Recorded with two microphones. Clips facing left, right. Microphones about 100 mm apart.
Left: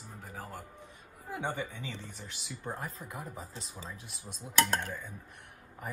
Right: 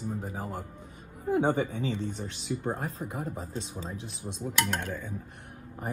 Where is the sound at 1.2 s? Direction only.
50° right (ahead or behind).